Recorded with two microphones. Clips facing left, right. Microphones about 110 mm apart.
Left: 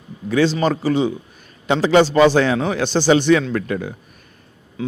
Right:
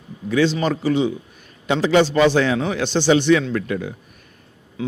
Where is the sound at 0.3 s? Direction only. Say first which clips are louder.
Left 2 dB; 40° left (ahead or behind).